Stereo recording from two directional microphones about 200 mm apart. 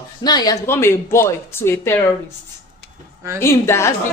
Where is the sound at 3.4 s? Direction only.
15° left (ahead or behind).